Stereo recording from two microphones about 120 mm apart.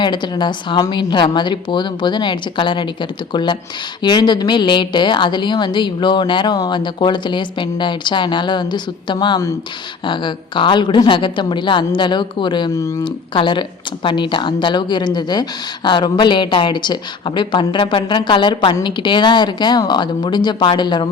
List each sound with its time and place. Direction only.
0.0 s a woman's voice: 40° left (ahead or behind)